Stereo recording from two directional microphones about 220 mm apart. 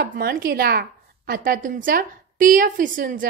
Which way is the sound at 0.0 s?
45° right (ahead or behind).